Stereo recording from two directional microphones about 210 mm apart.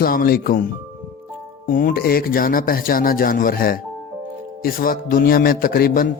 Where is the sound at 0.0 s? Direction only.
45° left (ahead or behind).